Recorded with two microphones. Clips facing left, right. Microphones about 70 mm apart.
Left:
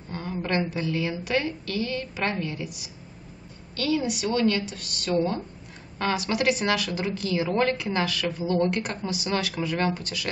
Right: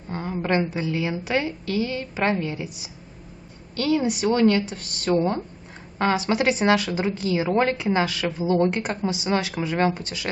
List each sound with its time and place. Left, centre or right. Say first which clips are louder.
0.1 s speech: right 4 dB; right